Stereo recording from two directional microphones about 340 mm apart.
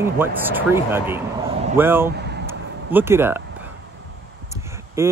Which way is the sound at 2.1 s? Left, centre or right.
Right.